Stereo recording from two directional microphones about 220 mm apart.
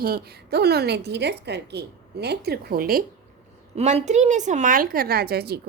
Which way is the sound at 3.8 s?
30° right (ahead or behind).